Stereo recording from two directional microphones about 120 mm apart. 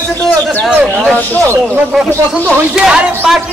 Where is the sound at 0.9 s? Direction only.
10° left (ahead or behind).